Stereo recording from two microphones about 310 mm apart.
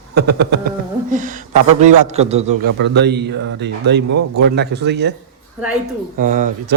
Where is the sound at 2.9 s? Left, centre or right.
Right.